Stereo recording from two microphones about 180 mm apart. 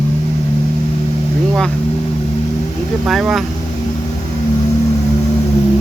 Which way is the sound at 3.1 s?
Centre (ahead or behind).